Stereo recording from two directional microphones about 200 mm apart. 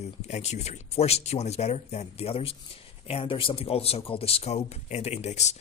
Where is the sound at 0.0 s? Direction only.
35° left (ahead or behind).